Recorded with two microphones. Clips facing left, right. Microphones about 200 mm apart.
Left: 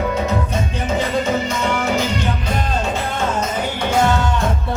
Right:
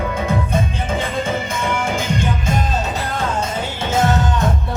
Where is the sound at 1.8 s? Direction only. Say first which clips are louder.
Left 1 dB; 50° right (ahead or behind).